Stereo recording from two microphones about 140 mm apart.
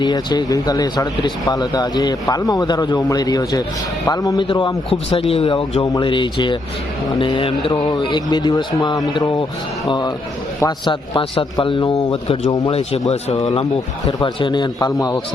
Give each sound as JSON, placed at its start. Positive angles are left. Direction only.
{"t": 0.0, "sound": "a man's voice", "side_deg": 30}
{"t": 5.8, "sound": "a man's voice", "side_deg": 30}
{"t": 10.6, "sound": "a man's voice", "side_deg": 30}
{"t": 13.4, "sound": "a man's voice", "side_deg": 35}